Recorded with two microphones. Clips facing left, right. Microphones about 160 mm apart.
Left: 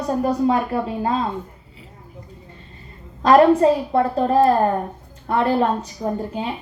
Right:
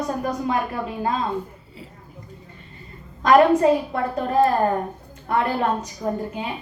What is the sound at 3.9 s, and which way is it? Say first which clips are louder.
A woman's voice: left 6 dB; 35° left (ahead or behind).